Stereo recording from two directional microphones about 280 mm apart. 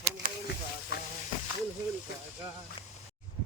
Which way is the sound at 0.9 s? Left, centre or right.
Left.